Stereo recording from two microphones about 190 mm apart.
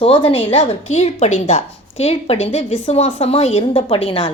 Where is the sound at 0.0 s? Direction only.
30° left (ahead or behind).